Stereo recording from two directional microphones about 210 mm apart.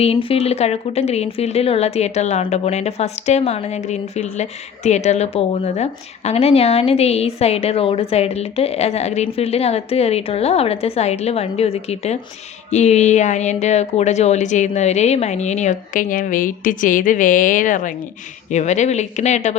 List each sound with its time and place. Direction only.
0.0 s a woman's voice: 25° left (ahead or behind)